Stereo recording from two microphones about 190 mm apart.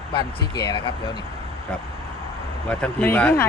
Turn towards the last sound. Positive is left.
turn(degrees=10)  # may be behind; listen again after turning